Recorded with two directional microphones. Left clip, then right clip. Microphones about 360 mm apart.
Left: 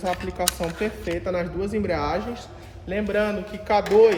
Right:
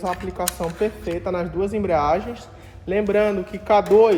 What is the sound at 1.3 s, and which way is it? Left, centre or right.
Speech, centre.